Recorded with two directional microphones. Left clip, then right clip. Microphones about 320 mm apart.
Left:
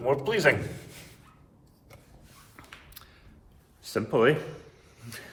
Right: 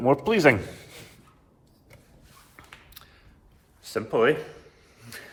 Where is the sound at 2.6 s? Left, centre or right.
Centre.